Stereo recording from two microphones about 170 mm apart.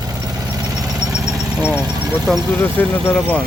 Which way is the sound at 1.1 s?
5° right (ahead or behind).